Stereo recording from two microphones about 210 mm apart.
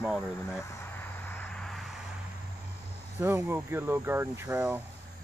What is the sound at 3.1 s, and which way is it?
Speech, 10° right (ahead or behind).